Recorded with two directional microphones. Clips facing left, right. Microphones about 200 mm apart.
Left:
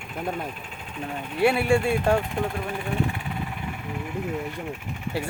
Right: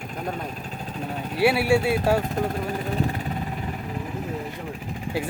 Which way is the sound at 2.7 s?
40° right (ahead or behind).